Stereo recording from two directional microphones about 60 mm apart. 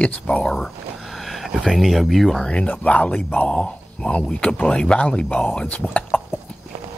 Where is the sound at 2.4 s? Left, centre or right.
Left.